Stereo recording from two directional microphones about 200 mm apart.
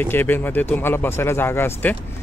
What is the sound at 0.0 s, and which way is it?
Speech, 10° left (ahead or behind).